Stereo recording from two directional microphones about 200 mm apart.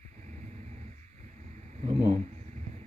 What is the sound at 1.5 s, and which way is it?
Vehicle, 35° right (ahead or behind).